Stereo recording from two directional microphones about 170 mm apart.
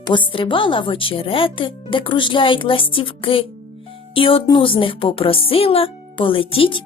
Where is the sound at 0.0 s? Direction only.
30° left (ahead or behind).